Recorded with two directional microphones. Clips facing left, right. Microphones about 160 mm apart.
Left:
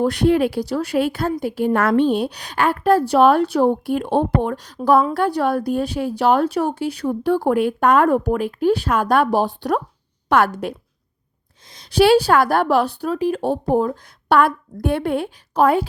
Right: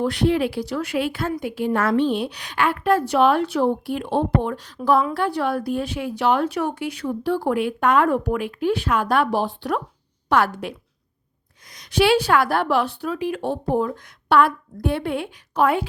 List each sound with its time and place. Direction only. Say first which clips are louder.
0.0 s a woman's voice: left 4 dB; 45° left (ahead or behind)
3.7 s a woman's voice: left 4 dB; 50° left (ahead or behind)
10.2 s speech: left 3 dB; 50° left (ahead or behind)
11.7 s a woman's voice: left 4 dB; 30° left (ahead or behind)